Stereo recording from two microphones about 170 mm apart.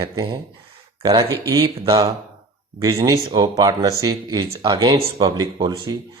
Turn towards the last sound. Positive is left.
turn(degrees=-25)  # may be behind; listen again after turning